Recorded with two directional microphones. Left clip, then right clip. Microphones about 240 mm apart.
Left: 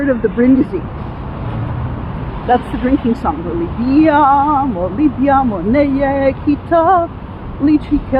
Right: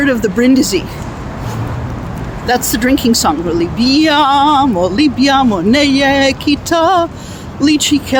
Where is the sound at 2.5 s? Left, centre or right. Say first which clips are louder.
Right 1 dB; right.